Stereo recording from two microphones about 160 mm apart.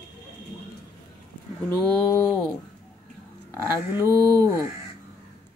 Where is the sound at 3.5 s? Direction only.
15° right (ahead or behind).